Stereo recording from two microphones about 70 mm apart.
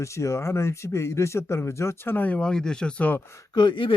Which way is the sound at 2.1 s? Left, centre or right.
Left.